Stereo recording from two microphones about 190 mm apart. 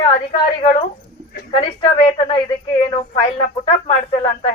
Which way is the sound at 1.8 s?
30° left (ahead or behind).